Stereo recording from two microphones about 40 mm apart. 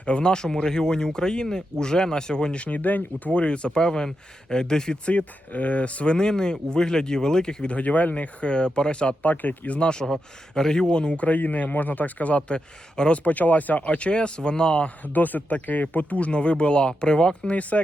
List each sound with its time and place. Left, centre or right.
0.0 s speech: left
3.3 s speech: left
5.0 s speech: left
6.1 s speech: centre
7.7 s speech: left
9.2 s speech: left
11.2 s speech: left
12.4 s speech: left
13.2 s speech: left
15.0 s speech: left
17.5 s speech: left